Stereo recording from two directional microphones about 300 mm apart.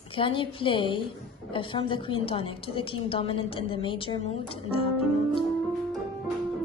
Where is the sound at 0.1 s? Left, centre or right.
Centre.